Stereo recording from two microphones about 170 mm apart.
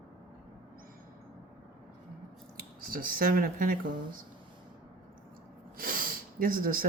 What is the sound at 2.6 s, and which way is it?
Speech, 55° right (ahead or behind).